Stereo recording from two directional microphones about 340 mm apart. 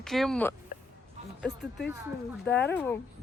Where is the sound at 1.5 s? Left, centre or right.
Left.